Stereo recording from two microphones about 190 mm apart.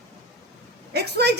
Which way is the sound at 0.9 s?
60° right (ahead or behind).